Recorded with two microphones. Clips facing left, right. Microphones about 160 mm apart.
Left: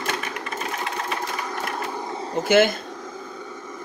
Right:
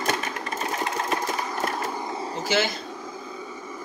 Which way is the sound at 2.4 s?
55° left (ahead or behind).